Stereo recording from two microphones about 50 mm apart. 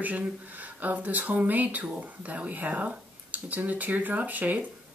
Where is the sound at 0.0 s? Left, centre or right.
Right.